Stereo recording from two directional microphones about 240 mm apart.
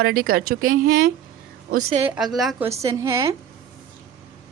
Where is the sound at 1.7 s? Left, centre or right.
Right.